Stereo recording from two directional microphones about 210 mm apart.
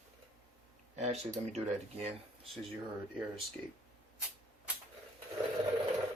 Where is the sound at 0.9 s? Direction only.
30° right (ahead or behind).